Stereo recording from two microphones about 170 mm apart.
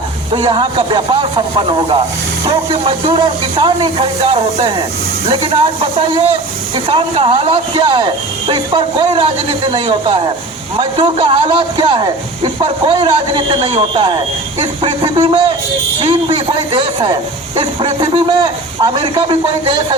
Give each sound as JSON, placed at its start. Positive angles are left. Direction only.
{"t": 0.4, "sound": "a man's voice", "side_deg": -30}